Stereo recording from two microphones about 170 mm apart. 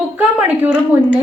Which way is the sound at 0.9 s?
10° right (ahead or behind).